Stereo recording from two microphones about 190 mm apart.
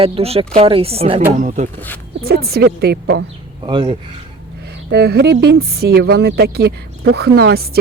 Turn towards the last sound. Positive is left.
turn(degrees=-55)  # may be behind; listen again after turning